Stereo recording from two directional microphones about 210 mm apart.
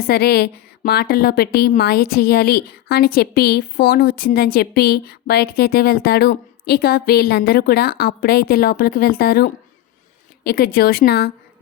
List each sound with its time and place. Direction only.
0.0 s a woman's voice: 50° left (ahead or behind)